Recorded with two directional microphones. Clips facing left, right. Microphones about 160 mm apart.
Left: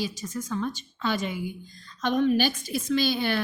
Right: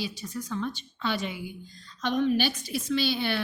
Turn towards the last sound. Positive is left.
turn(degrees=45)  # may be behind; listen again after turning